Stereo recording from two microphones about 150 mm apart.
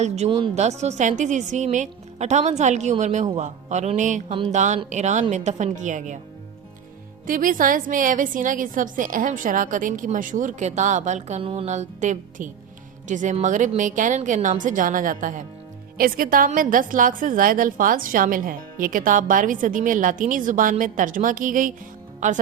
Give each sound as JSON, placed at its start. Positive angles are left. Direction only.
{"t": 0.3, "sound": "speech", "side_deg": -35}
{"t": 0.5, "sound": "a woman's voice", "side_deg": -50}
{"t": 7.3, "sound": "a woman's voice", "side_deg": -65}
{"t": 16.0, "sound": "a woman's voice", "side_deg": -75}